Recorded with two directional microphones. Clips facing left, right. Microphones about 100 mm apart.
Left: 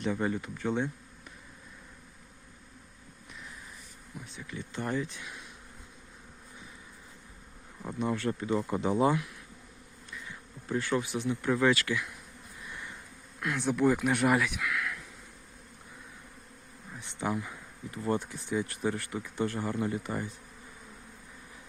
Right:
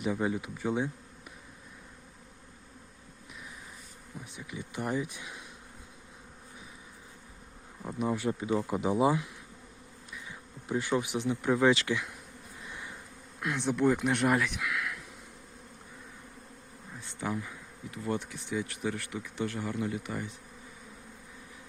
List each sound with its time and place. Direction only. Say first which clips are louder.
0.0 s speech: even; 10° right (ahead or behind)
4.2 s speech: even; 15° right (ahead or behind)
7.8 s speech: even; 5° right (ahead or behind)
10.1 s bee: left 1 dB; 15° right (ahead or behind)
13.6 s speech: left 1 dB; centre (ahead or behind)
17.0 s speech: left 2 dB; 25° left (ahead or behind)
17.9 s speech: left 3 dB; 35° left (ahead or behind)